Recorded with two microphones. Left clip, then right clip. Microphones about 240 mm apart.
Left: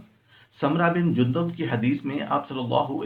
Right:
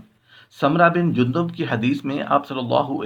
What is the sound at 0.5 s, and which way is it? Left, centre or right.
Speech, right.